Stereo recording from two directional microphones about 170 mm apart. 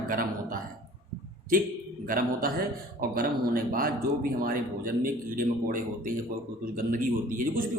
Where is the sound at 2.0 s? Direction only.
55° right (ahead or behind).